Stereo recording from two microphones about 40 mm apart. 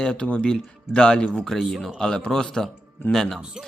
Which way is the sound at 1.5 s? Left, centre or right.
Centre.